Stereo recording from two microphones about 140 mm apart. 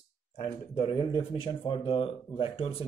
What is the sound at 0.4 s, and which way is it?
Speech, 40° left (ahead or behind).